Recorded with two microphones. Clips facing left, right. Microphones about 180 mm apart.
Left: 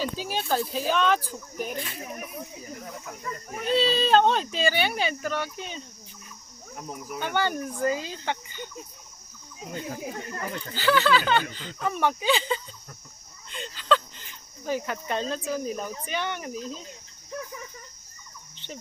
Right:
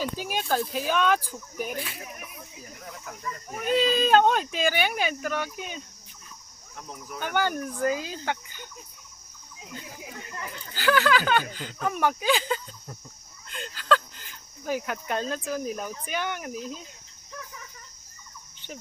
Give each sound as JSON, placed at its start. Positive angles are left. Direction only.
{"t": 0.0, "sound": "speech", "side_deg": -10}
{"t": 3.6, "sound": "speech", "side_deg": -10}
{"t": 6.7, "sound": "speech", "side_deg": 10}
{"t": 7.3, "sound": "speech", "side_deg": -5}
{"t": 9.6, "sound": "speech", "side_deg": 45}
{"t": 10.8, "sound": "speech", "side_deg": -10}